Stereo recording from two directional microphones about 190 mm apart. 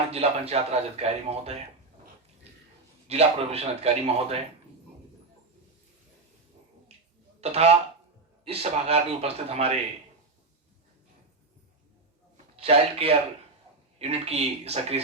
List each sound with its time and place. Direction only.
0.1 s a man's voice: 30° right (ahead or behind)
3.1 s a man's voice: 35° right (ahead or behind)
7.4 s a man's voice: 35° right (ahead or behind)
12.5 s a man's voice: 30° right (ahead or behind)